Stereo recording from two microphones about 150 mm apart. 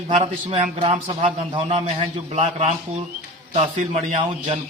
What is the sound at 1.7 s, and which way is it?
A man's voice, 50° right (ahead or behind).